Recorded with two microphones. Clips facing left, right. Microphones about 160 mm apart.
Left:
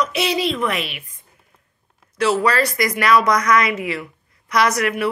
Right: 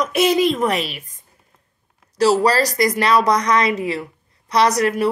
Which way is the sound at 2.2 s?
35° right (ahead or behind).